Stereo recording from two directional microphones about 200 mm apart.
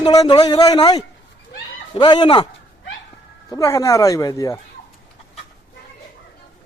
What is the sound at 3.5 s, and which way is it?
Speech, 15° left (ahead or behind).